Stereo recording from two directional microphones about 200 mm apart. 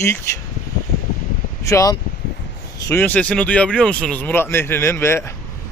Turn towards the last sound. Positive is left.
turn(degrees=10)  # may be behind; listen again after turning